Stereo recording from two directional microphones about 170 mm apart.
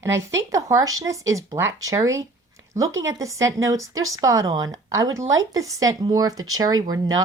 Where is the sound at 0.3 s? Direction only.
20° right (ahead or behind).